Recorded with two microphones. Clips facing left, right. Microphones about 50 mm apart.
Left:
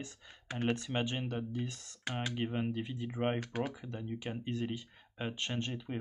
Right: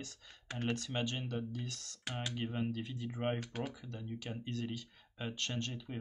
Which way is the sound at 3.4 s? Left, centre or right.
Centre.